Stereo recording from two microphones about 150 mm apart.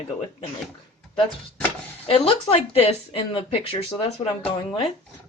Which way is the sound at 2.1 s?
40° left (ahead or behind).